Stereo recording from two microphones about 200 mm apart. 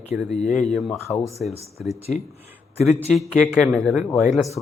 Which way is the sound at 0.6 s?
Centre (ahead or behind).